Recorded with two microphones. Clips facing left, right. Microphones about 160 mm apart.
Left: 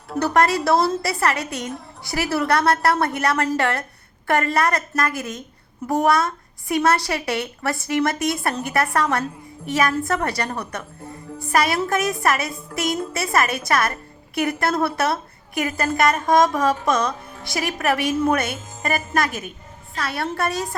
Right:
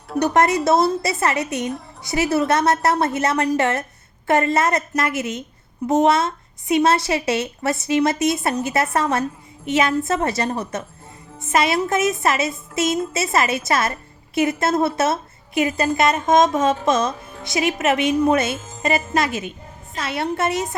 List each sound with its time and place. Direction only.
0.2 s a woman's voice: 20° right (ahead or behind)